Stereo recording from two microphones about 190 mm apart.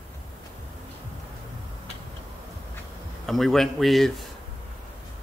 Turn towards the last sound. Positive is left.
turn(degrees=0)  # may be behind; listen again after turning